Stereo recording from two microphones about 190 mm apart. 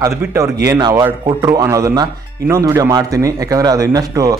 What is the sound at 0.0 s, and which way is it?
Speech, 15° right (ahead or behind).